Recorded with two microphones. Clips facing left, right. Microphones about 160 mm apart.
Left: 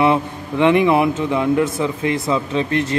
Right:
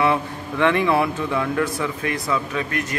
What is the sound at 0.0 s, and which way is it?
Speech, 20° left (ahead or behind).